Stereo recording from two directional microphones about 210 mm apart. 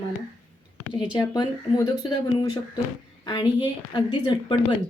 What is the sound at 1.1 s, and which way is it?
A woman's voice, 20° left (ahead or behind).